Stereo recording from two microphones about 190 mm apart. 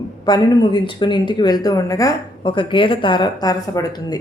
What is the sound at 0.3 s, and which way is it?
A woman's voice, 20° left (ahead or behind).